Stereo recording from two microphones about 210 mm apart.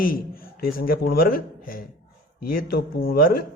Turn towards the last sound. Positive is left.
turn(degrees=45)  # may be behind; listen again after turning